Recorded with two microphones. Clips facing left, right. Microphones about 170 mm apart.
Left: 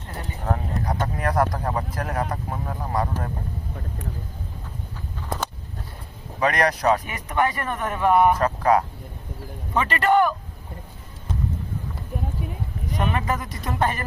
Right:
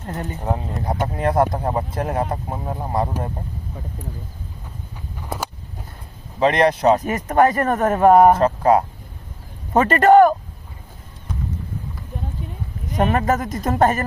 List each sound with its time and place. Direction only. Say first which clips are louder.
0.4 s speech: right 1 dB; 20° right (ahead or behind)
3.1 s speech: right 3 dB; 15° right (ahead or behind)
6.4 s speech: right 5 dB; 25° right (ahead or behind)
7.0 s speech: right 7 dB; 45° right (ahead or behind)
8.3 s speech: right 4 dB; 25° right (ahead or behind)
9.7 s speech: right 8 dB; 45° right (ahead or behind)
13.0 s speech: right 7 dB; 45° right (ahead or behind)